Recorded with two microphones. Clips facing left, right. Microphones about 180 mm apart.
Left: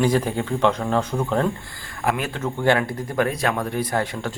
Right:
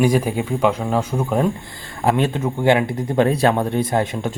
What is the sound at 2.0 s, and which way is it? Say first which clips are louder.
Speech: right 6 dB; 30° right (ahead or behind).